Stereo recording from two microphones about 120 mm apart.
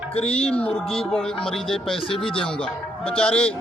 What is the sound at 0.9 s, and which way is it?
Speech, centre (ahead or behind).